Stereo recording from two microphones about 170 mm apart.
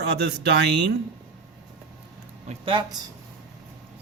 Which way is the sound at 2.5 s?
30° right (ahead or behind).